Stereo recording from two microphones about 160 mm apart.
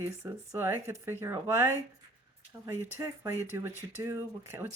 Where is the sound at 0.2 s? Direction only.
15° right (ahead or behind).